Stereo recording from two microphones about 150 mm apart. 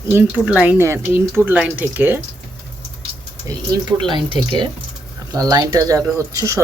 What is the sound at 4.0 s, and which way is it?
Speech, 35° right (ahead or behind).